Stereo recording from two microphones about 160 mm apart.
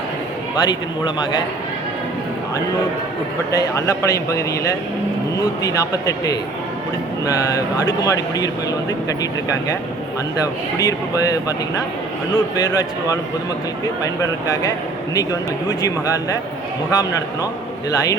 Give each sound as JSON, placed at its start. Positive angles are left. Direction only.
{"t": 0.5, "sound": "speech", "side_deg": 25}
{"t": 3.5, "sound": "speech", "side_deg": 20}
{"t": 10.4, "sound": "speech", "side_deg": 20}
{"t": 12.5, "sound": "speech", "side_deg": 25}
{"t": 14.2, "sound": "speech", "side_deg": 20}